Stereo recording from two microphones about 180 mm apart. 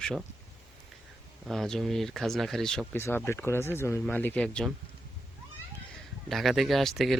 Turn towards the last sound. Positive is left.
turn(degrees=0)  # may be behind; listen again after turning